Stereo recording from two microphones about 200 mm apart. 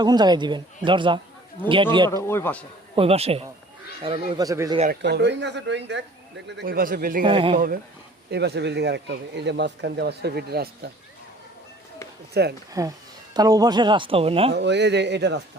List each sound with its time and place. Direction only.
0.0 s speech: 20° right (ahead or behind)
2.0 s speech: 15° left (ahead or behind)
2.9 s speech: 30° right (ahead or behind)
4.9 s speech: 55° right (ahead or behind)
6.6 s a man's voice: 45° right (ahead or behind)
7.3 s speech: 25° right (ahead or behind)
7.5 s a man's voice: 45° right (ahead or behind)
8.3 s speech: 55° right (ahead or behind)
12.3 s speech: 55° right (ahead or behind)
12.8 s speech: 15° right (ahead or behind)
14.5 s speech: 60° right (ahead or behind)